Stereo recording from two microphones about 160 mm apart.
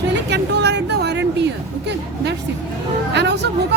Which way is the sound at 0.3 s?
90° right.